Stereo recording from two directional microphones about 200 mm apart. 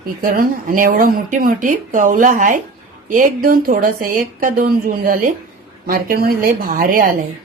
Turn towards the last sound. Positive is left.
turn(degrees=-45)  # may be behind; listen again after turning